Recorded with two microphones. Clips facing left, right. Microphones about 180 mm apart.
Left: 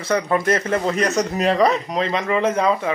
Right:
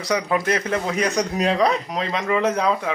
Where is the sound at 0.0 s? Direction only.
Centre (ahead or behind).